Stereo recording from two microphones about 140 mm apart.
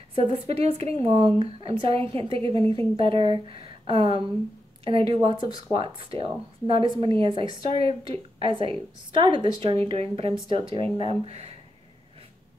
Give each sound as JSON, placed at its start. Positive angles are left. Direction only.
{"t": 0.1, "sound": "speech", "side_deg": -40}